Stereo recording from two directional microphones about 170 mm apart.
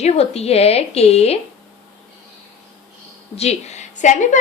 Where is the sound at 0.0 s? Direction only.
40° left (ahead or behind).